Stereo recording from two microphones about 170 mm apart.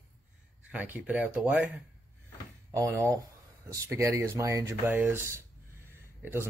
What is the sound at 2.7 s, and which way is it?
Speech, 20° right (ahead or behind).